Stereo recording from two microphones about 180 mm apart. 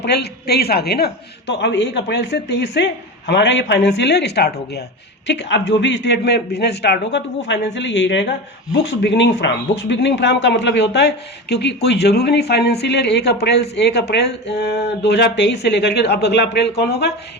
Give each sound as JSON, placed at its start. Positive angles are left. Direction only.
{"t": 0.0, "sound": "speech", "side_deg": 65}